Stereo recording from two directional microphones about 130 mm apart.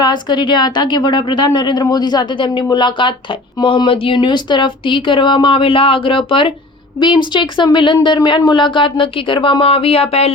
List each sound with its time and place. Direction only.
0.0 s a woman's voice: 35° left (ahead or behind)